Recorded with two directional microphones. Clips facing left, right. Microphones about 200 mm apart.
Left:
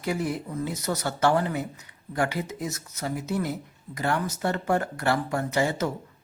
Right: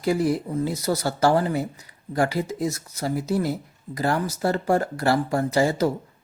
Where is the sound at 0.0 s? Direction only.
35° right (ahead or behind).